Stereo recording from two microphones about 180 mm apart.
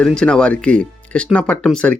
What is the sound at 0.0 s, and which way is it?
Speech, 5° left (ahead or behind).